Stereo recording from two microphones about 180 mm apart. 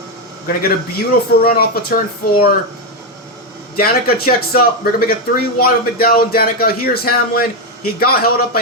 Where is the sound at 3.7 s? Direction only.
55° left (ahead or behind).